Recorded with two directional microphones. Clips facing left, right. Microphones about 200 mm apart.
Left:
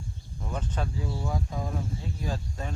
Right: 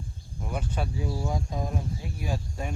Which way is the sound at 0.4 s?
10° right (ahead or behind).